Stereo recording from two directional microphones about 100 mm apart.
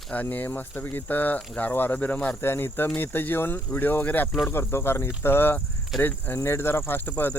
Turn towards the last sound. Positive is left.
turn(degrees=20)  # may be behind; listen again after turning